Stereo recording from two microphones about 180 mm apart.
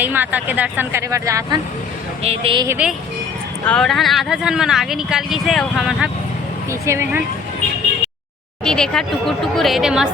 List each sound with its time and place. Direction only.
0.0 s speech: 10° right (ahead or behind)
2.2 s a woman's voice: 30° right (ahead or behind)
2.6 s speech: 10° right (ahead or behind)
3.7 s speech: centre (ahead or behind)
6.7 s speech: 15° right (ahead or behind)
8.6 s speech: 5° left (ahead or behind)